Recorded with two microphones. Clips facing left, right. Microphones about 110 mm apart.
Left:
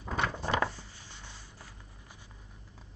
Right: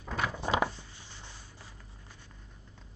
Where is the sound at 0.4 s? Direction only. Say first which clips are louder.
Right 3 dB; 15° right (ahead or behind).